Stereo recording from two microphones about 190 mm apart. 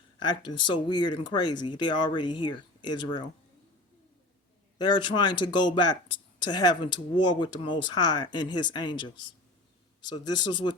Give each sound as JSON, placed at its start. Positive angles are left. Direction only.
{"t": 0.3, "sound": "speech", "side_deg": 25}
{"t": 4.8, "sound": "speech", "side_deg": 25}